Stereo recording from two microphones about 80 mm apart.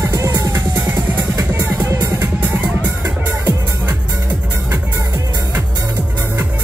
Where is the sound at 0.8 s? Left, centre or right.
Right.